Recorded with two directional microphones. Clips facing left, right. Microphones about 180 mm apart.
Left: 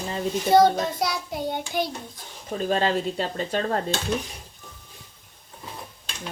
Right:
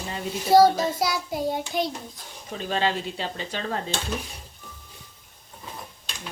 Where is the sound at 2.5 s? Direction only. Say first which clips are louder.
Left 3 dB; 40° left (ahead or behind).